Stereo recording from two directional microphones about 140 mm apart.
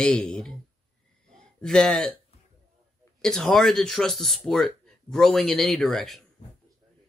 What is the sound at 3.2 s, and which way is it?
Speech, 5° left (ahead or behind).